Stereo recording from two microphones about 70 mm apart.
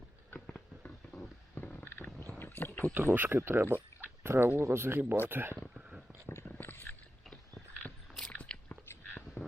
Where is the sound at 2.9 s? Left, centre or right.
Right.